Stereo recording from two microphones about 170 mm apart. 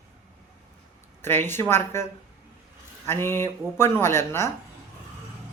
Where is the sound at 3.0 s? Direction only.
15° left (ahead or behind).